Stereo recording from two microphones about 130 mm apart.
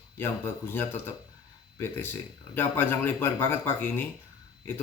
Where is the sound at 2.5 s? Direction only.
15° left (ahead or behind).